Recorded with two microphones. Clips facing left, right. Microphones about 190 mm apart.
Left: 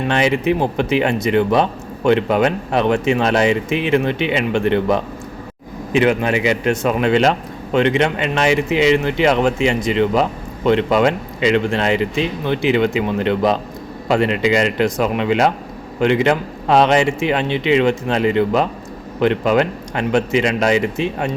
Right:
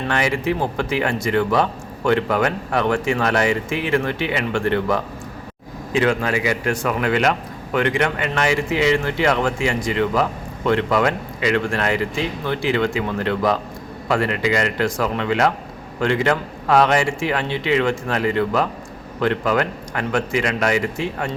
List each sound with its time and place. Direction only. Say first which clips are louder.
0.0 s a man's voice: left 4 dB; 20° left (ahead or behind)